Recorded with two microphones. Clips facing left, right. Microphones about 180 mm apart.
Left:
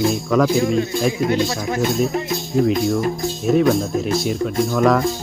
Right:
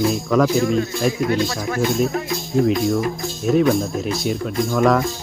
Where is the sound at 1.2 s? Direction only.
20° left (ahead or behind).